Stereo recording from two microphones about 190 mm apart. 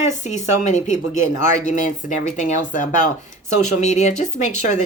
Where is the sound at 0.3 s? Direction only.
40° left (ahead or behind).